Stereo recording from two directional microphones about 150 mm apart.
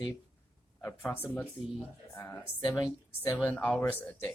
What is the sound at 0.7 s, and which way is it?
Speech, 10° left (ahead or behind).